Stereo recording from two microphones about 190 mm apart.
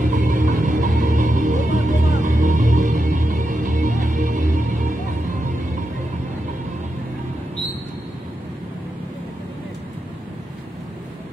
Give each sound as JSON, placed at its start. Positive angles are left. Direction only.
{"t": 0.1, "sound": "music", "side_deg": -40}